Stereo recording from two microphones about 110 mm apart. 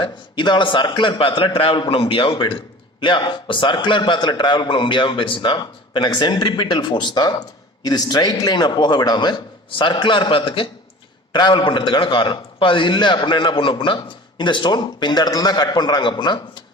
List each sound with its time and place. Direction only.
0.0 s a man's voice: 45° left (ahead or behind)
11.3 s a man's voice: 40° left (ahead or behind)